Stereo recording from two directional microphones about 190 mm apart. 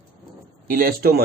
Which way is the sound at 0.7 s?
50° right (ahead or behind).